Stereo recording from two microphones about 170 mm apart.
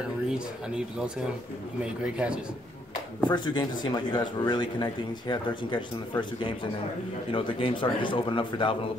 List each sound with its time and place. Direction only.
0.3 s speech: 5° right (ahead or behind)
3.3 s speech: 25° left (ahead or behind)